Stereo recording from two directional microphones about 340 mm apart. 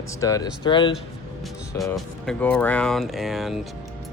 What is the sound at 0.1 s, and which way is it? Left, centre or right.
Speech, centre.